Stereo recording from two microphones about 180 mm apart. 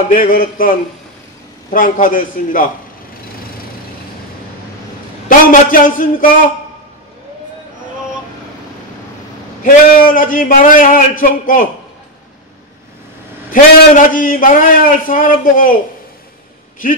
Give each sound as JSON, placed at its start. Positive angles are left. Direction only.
{"t": 0.1, "sound": "a man's voice", "side_deg": 50}
{"t": 5.3, "sound": "a man's voice", "side_deg": 50}
{"t": 9.6, "sound": "a man's voice", "side_deg": 50}
{"t": 13.5, "sound": "a man's voice", "side_deg": 50}